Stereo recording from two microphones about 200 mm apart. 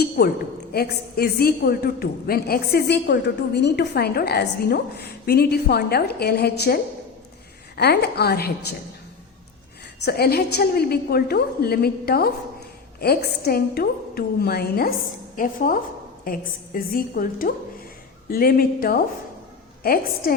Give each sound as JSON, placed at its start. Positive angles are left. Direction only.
{"t": 0.2, "sound": "a woman's voice", "side_deg": 50}
{"t": 7.8, "sound": "a woman's voice", "side_deg": 55}
{"t": 10.0, "sound": "a woman's voice", "side_deg": 55}